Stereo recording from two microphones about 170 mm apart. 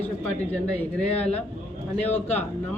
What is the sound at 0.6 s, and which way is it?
Speech, 5° left (ahead or behind).